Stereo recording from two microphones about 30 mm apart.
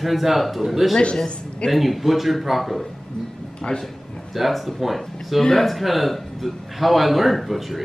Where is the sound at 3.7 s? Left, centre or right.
Left.